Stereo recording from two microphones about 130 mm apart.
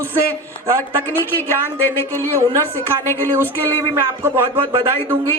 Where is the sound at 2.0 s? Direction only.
15° left (ahead or behind).